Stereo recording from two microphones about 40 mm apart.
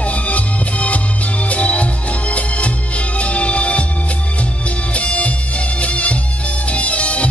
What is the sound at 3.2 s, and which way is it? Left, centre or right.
Music, left.